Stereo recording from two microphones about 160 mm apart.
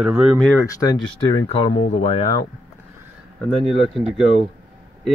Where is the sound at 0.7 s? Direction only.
20° left (ahead or behind).